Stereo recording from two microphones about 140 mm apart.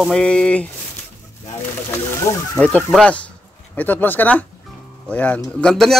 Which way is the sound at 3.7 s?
10° left (ahead or behind).